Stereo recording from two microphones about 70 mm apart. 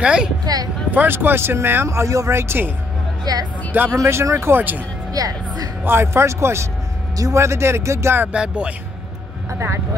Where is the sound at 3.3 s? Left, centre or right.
Right.